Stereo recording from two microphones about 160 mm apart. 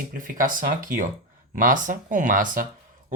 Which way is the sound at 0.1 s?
60° right (ahead or behind).